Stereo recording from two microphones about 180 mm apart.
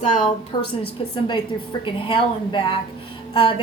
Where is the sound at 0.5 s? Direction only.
25° left (ahead or behind).